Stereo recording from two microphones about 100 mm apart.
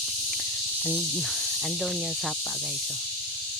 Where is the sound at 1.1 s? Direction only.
5° left (ahead or behind).